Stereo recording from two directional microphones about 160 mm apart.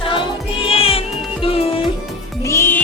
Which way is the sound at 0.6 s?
35° left (ahead or behind).